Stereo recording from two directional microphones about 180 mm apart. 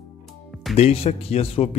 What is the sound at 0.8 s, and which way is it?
Speech, 35° left (ahead or behind).